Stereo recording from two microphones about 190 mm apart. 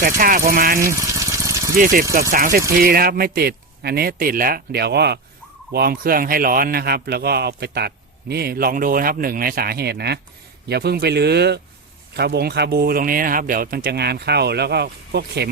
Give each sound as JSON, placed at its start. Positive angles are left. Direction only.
{"t": 0.0, "sound": "speech", "side_deg": -45}
{"t": 0.9, "sound": "engine", "side_deg": -15}
{"t": 1.7, "sound": "speech", "side_deg": -45}